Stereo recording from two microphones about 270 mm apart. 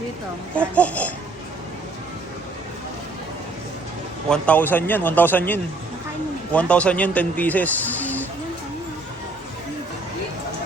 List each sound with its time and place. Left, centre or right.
0.5 s a man's voice: centre
4.3 s a man's voice: centre